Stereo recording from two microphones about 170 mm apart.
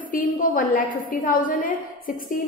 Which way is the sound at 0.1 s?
55° left (ahead or behind).